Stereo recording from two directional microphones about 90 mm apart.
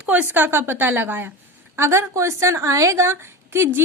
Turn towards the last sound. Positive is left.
turn(degrees=-30)  # may be behind; listen again after turning